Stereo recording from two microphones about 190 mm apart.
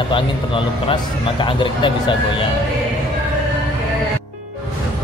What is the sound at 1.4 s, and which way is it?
Speech, 25° left (ahead or behind).